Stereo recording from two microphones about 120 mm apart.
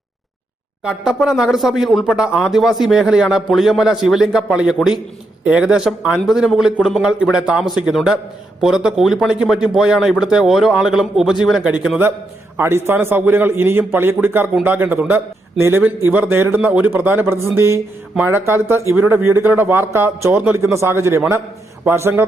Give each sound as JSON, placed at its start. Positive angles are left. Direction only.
{"t": 0.9, "sound": "a man's voice", "side_deg": -5}